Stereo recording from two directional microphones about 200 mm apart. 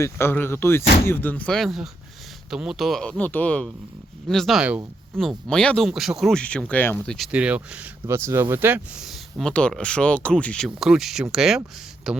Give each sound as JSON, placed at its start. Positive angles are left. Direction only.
{"t": 0.0, "sound": "speech", "side_deg": 10}